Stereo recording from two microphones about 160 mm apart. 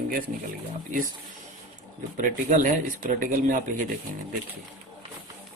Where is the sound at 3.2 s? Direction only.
60° right (ahead or behind).